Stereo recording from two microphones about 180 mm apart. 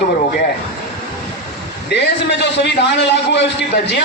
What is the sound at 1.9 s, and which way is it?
A man's voice, 70° left (ahead or behind).